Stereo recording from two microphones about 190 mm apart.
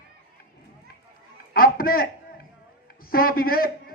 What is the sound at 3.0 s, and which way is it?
Speech, 50° left (ahead or behind).